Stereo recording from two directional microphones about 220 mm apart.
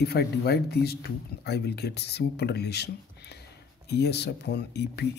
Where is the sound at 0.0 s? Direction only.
45° left (ahead or behind).